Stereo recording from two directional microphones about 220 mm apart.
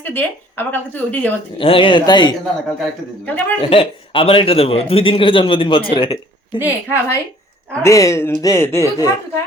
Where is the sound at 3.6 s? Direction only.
25° left (ahead or behind).